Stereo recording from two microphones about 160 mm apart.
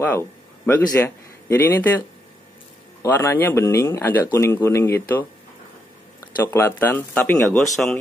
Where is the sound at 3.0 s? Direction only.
15° left (ahead or behind).